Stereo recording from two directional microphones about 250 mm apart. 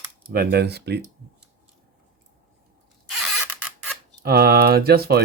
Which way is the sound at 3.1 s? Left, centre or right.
Centre.